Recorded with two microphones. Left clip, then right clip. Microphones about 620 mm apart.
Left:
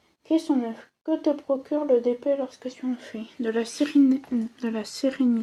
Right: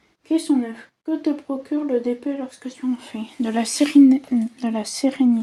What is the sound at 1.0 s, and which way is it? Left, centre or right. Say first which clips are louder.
Speech: even; left.